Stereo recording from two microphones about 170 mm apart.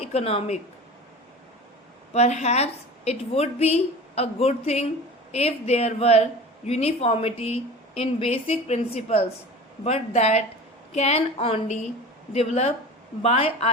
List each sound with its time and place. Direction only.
0.0 s speech: 35° left (ahead or behind)
2.1 s a woman's voice: 40° left (ahead or behind)